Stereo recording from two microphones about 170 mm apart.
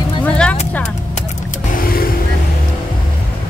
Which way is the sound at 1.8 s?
60° left (ahead or behind).